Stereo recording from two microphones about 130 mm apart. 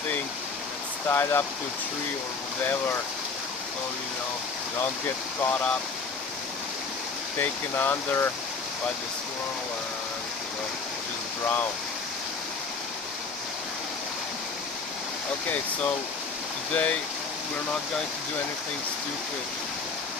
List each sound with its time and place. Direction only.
1.0 s speech: 20° left (ahead or behind)
5.4 s speech: 10° left (ahead or behind)
7.3 s speech: 15° left (ahead or behind)
15.4 s speech: 10° left (ahead or behind)